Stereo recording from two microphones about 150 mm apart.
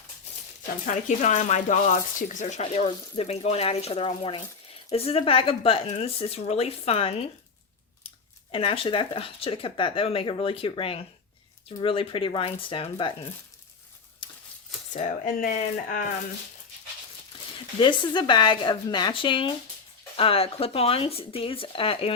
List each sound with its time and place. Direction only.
0.9 s speech: 55° left (ahead or behind)
8.5 s speech: 35° left (ahead or behind)
14.2 s a sound: 35° left (ahead or behind)
14.9 s speech: 60° left (ahead or behind)
17.7 s speech: 30° left (ahead or behind)